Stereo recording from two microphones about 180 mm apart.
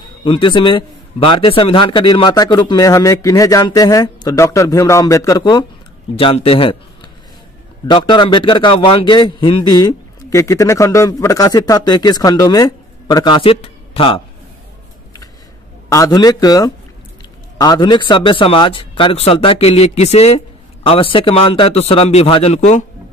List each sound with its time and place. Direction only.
0.2 s a man's voice: 30° left (ahead or behind)
7.9 s a man's voice: 25° left (ahead or behind)
15.9 s a man's voice: 20° left (ahead or behind); by 22.8 s 40° left (ahead or behind)